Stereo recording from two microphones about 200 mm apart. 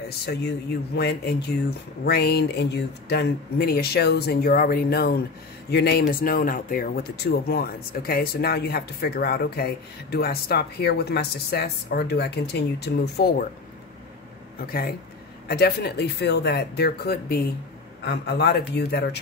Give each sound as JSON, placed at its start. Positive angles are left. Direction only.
{"t": 0.9, "sound": "speech", "side_deg": 50}
{"t": 14.6, "sound": "speech", "side_deg": 50}